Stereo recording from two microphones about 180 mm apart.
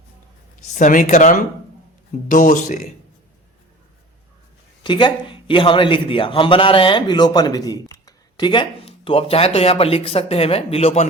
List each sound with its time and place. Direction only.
0.7 s speech: 45° left (ahead or behind)
4.8 s a man's voice: 25° left (ahead or behind)